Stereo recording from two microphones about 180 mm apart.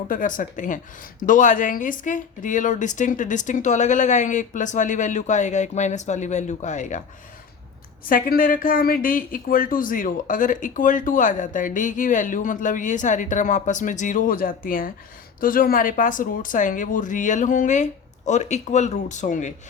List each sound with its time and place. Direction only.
0.1 s speech: 50° left (ahead or behind)
8.1 s speech: 50° left (ahead or behind)